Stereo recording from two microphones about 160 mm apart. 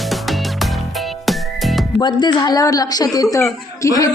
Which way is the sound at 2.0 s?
25° left (ahead or behind).